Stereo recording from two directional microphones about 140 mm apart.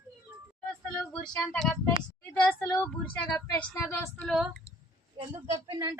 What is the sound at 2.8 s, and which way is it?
Speech, 10° left (ahead or behind).